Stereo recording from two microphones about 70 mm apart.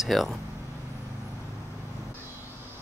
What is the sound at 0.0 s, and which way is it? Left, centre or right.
Speech, centre.